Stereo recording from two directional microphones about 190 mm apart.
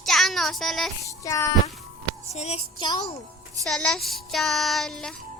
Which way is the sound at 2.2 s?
35° left (ahead or behind).